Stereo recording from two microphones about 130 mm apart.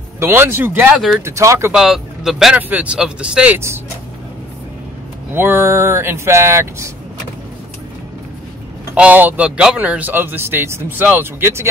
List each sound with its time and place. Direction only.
0.2 s speech: 20° right (ahead or behind)
1.2 s speech: 25° right (ahead or behind)
1.7 s speech: 5° right (ahead or behind)
5.3 s speech: 15° right (ahead or behind)
8.9 s speech: 10° right (ahead or behind)